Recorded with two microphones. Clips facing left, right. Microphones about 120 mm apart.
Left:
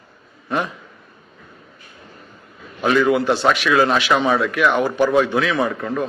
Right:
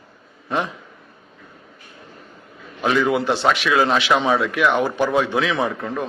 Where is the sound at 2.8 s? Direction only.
15° right (ahead or behind).